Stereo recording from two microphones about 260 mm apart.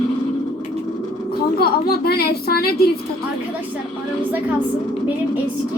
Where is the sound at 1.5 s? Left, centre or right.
Left.